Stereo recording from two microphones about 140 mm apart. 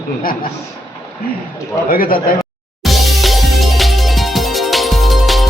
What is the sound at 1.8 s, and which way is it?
Speech, 90° left.